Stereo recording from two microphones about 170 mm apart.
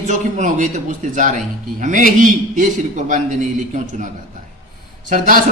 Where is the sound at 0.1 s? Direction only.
45° right (ahead or behind).